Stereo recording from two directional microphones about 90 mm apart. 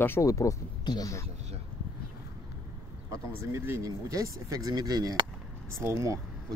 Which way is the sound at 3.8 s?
40° right (ahead or behind).